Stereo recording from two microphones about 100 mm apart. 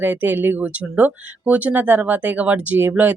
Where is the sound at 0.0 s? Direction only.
20° right (ahead or behind).